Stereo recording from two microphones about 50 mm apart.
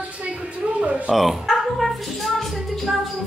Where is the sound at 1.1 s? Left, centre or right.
Centre.